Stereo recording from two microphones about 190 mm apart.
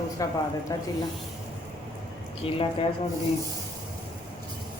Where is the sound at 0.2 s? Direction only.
15° left (ahead or behind).